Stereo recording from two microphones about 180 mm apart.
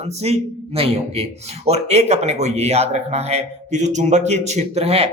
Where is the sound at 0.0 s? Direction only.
35° right (ahead or behind).